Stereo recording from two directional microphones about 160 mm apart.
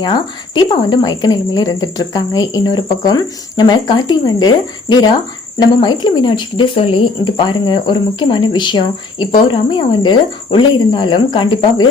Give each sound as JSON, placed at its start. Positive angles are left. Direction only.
{"t": 0.0, "sound": "a woman's voice", "side_deg": 25}